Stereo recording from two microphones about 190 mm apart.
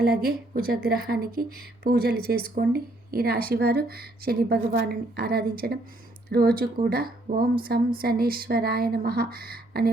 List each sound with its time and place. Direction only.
0.0 s speech: 55° right (ahead or behind)